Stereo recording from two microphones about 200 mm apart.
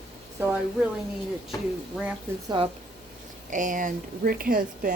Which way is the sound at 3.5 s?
40° right (ahead or behind).